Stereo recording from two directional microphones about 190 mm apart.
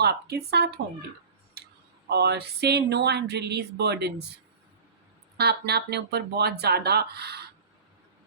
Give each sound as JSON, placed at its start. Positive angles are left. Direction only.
{"t": 0.0, "sound": "speech", "side_deg": -55}
{"t": 2.0, "sound": "speech", "side_deg": -60}
{"t": 5.4, "sound": "speech", "side_deg": -60}